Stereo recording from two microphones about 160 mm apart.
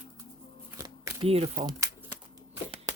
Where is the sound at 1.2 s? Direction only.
40° right (ahead or behind).